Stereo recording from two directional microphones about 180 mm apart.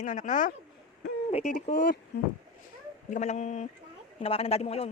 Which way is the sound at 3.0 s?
45° left (ahead or behind).